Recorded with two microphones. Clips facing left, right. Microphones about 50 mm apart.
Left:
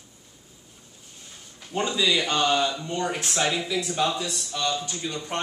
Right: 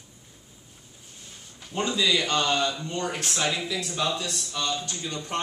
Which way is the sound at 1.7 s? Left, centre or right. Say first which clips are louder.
Left 1 dB; centre.